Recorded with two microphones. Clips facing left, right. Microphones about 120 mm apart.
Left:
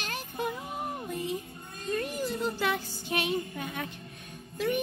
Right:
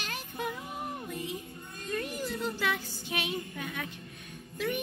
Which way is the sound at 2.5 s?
40° left (ahead or behind).